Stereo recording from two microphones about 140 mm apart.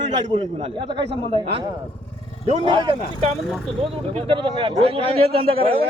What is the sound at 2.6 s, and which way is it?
A man's voice, 35° right (ahead or behind).